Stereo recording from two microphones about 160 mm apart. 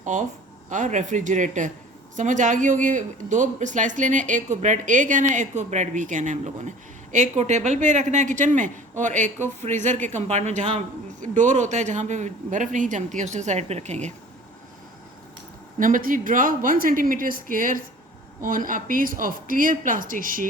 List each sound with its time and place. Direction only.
0.0 s speech: 50° right (ahead or behind)
15.8 s speech: 60° right (ahead or behind)